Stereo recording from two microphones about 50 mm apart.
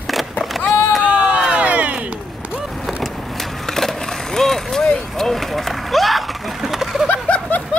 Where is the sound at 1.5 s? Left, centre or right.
Right.